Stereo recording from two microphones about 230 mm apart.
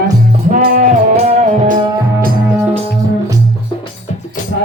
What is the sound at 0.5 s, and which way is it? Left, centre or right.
Music, right.